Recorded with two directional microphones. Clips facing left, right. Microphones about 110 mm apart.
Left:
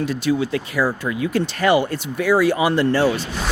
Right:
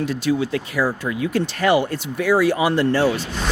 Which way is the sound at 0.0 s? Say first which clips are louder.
Even; 20° left (ahead or behind).